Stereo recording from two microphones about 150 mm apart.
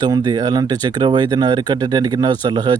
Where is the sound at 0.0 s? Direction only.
30° right (ahead or behind).